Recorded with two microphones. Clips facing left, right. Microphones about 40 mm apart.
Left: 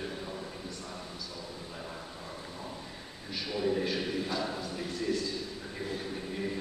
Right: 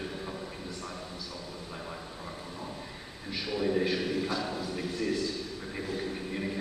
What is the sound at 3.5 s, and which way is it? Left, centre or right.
A man's voice, centre.